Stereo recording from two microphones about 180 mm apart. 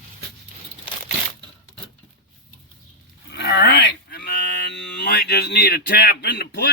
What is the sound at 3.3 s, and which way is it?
Speech, 70° left (ahead or behind).